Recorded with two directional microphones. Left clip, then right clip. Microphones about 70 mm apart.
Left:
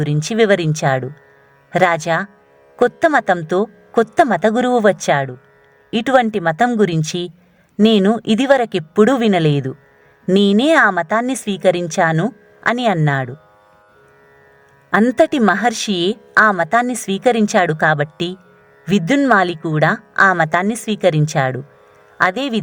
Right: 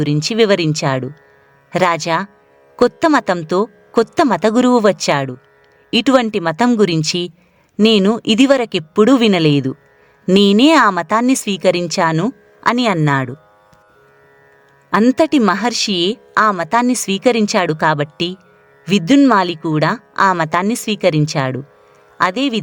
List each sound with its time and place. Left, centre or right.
0.0 s speech: right
4.4 s a woman's voice: right
9.1 s speech: right
10.3 s speech: right
15.0 s a woman's voice: right
21.1 s a woman's voice: right